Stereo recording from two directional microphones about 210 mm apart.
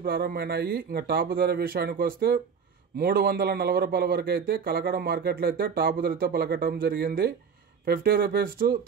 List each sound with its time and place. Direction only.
0.0 s a man's voice: 45° right (ahead or behind)